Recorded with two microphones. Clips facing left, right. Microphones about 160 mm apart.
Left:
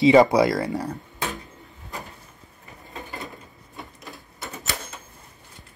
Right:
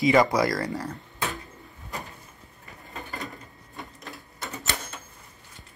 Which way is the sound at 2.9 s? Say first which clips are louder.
Left 1 dB; 20° left (ahead or behind).